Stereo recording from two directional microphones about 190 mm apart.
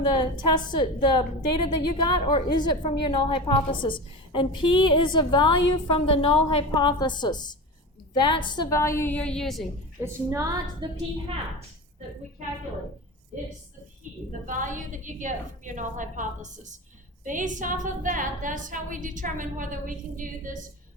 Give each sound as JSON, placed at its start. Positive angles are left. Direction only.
{"t": 0.0, "sound": "a woman's voice", "side_deg": 25}
{"t": 10.0, "sound": "a woman's voice", "side_deg": -15}
{"t": 14.4, "sound": "a woman's voice", "side_deg": -45}